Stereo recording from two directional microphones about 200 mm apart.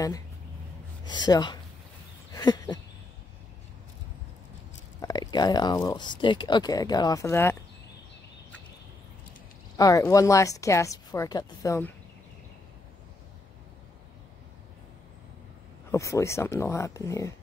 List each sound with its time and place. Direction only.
1.0 s speech: 20° left (ahead or behind)
2.3 s a sound: 20° left (ahead or behind)
5.0 s speech: 20° left (ahead or behind)
9.8 s a woman's voice: 15° left (ahead or behind)
15.9 s a woman's voice: 15° left (ahead or behind)